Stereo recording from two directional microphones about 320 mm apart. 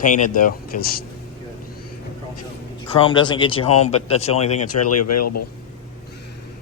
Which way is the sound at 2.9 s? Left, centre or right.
Centre.